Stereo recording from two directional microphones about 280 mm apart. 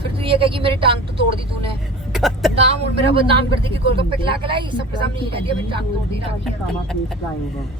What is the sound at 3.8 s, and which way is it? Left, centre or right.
Speech, centre.